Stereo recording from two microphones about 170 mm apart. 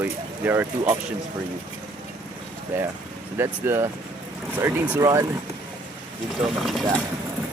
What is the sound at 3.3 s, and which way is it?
Speech, 15° right (ahead or behind).